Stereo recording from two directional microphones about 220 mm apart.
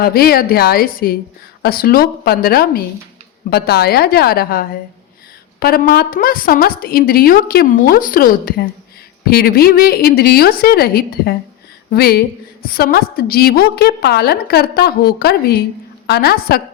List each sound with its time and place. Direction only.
0.0 s a woman's voice: 45° left (ahead or behind)